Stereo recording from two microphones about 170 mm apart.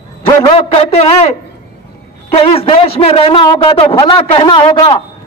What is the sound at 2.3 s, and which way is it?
A man's voice, 35° left (ahead or behind).